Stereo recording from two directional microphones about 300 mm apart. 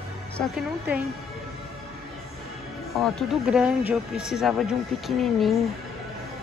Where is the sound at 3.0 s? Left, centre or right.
Centre.